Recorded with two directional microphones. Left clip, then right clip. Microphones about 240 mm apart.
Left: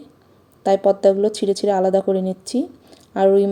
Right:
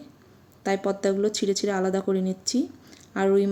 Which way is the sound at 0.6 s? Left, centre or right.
Centre.